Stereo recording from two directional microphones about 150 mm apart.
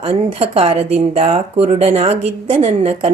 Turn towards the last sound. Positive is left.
turn(degrees=-45)  # may be behind; listen again after turning